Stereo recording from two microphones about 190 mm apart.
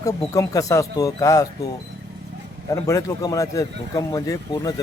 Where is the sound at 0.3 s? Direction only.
15° left (ahead or behind).